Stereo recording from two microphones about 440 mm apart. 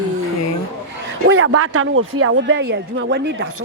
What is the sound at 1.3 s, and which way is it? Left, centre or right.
A man's voice, right.